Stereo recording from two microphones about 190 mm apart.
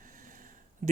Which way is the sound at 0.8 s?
40° right (ahead or behind).